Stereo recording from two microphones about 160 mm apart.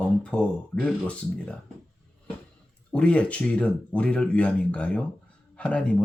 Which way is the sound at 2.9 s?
5° left (ahead or behind).